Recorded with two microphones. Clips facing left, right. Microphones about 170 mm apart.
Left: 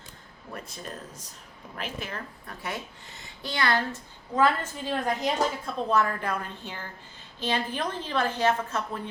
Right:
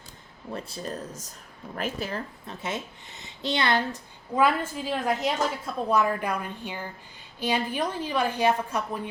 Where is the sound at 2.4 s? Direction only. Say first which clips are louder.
Right 3 dB; 20° right (ahead or behind); by 5.3 s centre (ahead or behind).